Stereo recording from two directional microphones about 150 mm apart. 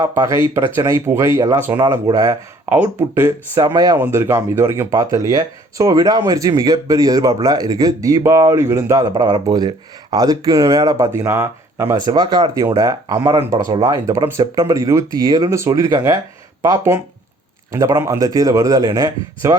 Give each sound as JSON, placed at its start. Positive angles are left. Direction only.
{"t": 0.2, "sound": "speech", "side_deg": -20}
{"t": 2.6, "sound": "speech", "side_deg": -10}
{"t": 3.9, "sound": "speech", "side_deg": -15}